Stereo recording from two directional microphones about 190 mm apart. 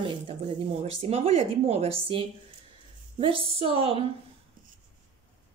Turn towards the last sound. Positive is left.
turn(degrees=-30)  # may be behind; listen again after turning